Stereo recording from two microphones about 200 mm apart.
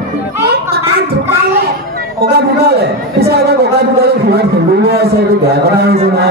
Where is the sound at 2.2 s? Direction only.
50° right (ahead or behind).